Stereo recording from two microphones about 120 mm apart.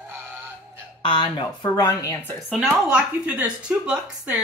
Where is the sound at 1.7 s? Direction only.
25° left (ahead or behind).